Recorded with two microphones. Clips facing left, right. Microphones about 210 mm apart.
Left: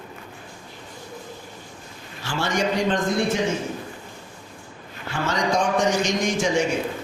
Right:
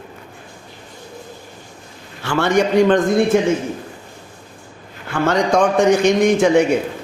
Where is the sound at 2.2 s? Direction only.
60° right (ahead or behind).